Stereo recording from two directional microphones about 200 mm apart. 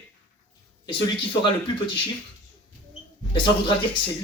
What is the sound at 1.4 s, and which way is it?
Speech, 25° left (ahead or behind).